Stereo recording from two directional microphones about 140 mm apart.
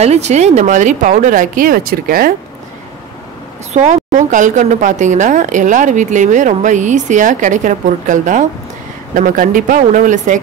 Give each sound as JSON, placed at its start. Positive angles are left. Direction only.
{"t": 0.0, "sound": "a woman's voice", "side_deg": -50}
{"t": 3.7, "sound": "a woman's voice", "side_deg": -60}